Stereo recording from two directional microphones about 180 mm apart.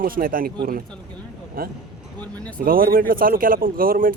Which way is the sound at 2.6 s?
55° right (ahead or behind).